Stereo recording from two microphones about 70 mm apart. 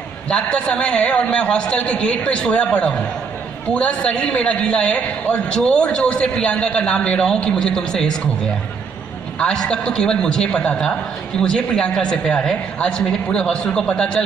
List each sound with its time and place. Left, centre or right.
0.3 s a man's voice: centre
9.4 s a man's voice: centre